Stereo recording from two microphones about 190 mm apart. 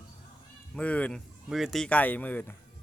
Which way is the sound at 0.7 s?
5° left (ahead or behind).